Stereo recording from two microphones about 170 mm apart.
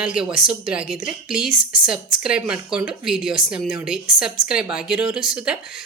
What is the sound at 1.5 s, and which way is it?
Speech, 55° left (ahead or behind).